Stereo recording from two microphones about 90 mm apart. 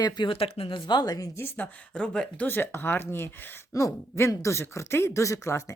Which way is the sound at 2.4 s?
25° left (ahead or behind).